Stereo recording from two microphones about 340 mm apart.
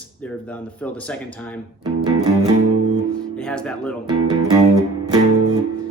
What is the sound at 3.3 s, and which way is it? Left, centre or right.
Speech, centre.